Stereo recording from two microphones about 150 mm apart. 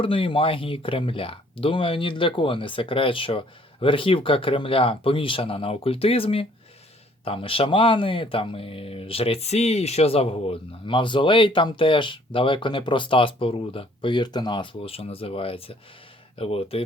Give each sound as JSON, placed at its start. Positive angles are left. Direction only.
{"t": 0.0, "sound": "speech", "side_deg": 35}